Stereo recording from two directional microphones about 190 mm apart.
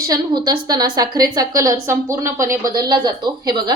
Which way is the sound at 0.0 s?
20° right (ahead or behind).